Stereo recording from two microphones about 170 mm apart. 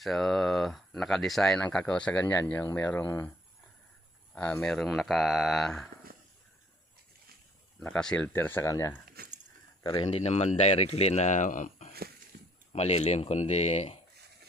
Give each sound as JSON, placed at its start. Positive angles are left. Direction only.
{"t": 0.0, "sound": "speech", "side_deg": 0}
{"t": 4.4, "sound": "speech", "side_deg": 5}
{"t": 7.8, "sound": "speech", "side_deg": 5}
{"t": 9.0, "sound": "a sound", "side_deg": -55}
{"t": 9.8, "sound": "speech", "side_deg": 30}
{"t": 12.3, "sound": "a sound", "side_deg": -65}
{"t": 12.7, "sound": "speech", "side_deg": 40}